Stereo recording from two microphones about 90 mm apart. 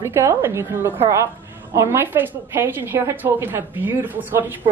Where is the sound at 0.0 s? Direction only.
35° right (ahead or behind).